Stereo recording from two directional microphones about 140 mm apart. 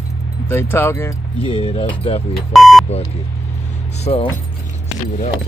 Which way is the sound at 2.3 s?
Centre (ahead or behind).